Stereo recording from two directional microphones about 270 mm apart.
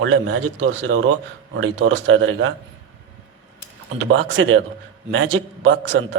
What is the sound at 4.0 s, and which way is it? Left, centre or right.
A man's voice, right.